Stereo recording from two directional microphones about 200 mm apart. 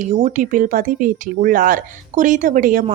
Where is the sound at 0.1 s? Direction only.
40° right (ahead or behind).